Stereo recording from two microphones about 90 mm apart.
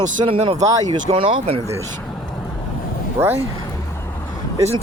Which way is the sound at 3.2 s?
25° right (ahead or behind).